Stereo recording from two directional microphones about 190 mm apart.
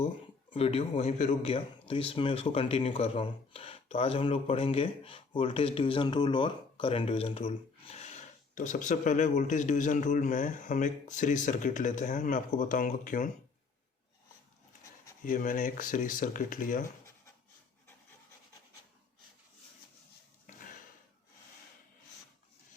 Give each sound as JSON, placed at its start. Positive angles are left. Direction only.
{"t": 0.5, "sound": "a man's voice", "side_deg": 30}
{"t": 15.2, "sound": "speech", "side_deg": 45}
{"t": 20.5, "sound": "a sound", "side_deg": 45}